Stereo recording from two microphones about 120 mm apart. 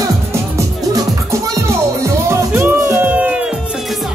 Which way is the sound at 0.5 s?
25° right (ahead or behind).